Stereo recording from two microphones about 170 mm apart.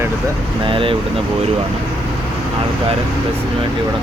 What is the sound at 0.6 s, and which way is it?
Speech, 30° right (ahead or behind).